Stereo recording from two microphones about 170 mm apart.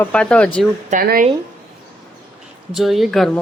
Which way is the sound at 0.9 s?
55° right (ahead or behind).